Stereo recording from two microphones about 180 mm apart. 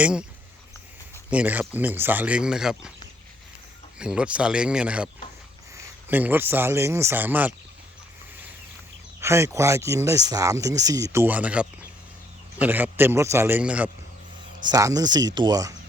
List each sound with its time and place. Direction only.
0.0 s speech: 5° right (ahead or behind)
1.3 s speech: 10° right (ahead or behind)
3.9 s a man's voice: 5° right (ahead or behind)
9.2 s speech: 15° right (ahead or behind)
14.7 s speech: 20° right (ahead or behind)